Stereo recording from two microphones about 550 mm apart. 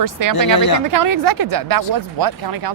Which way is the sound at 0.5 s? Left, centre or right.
Left.